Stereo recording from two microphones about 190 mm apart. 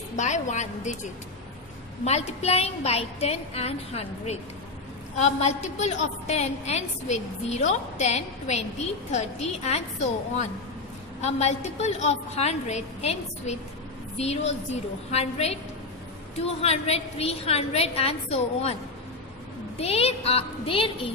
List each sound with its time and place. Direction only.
0.1 s a woman's voice: 40° left (ahead or behind)
2.0 s a woman's voice: 35° left (ahead or behind)
11.1 s a woman's voice: 35° left (ahead or behind)
19.8 s a woman's voice: 30° left (ahead or behind)